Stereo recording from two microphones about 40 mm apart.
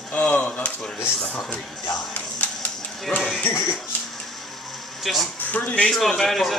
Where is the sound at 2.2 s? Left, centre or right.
Left.